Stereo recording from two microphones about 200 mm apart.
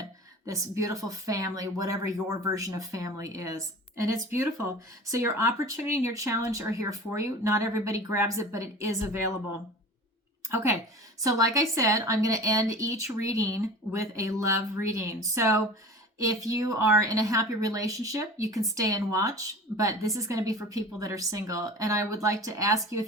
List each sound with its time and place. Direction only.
0.4 s a woman's voice: 15° right (ahead or behind)
5.0 s a woman's voice: 15° right (ahead or behind)
10.5 s a woman's voice: 10° right (ahead or behind)